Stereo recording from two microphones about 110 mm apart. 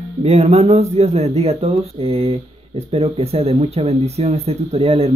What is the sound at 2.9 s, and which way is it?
Speech, 65° right (ahead or behind).